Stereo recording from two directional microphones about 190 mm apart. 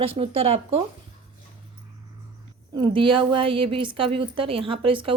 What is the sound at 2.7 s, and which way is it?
A woman's voice, 25° right (ahead or behind).